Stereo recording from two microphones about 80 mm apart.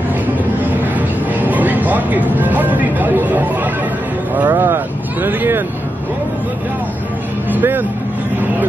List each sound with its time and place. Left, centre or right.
0.9 s music: right
4.4 s speech: right
7.5 s speech: right